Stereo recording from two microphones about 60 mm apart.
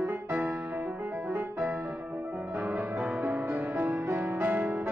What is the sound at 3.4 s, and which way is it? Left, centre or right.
Music, right.